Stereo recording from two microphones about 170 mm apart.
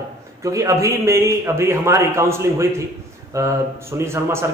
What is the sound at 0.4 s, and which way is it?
A man's voice, 20° right (ahead or behind).